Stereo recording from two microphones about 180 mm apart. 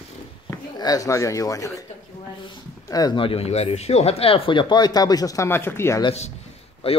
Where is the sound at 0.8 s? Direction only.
20° left (ahead or behind).